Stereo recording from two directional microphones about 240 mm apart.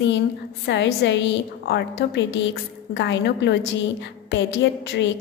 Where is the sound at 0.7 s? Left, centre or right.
Left.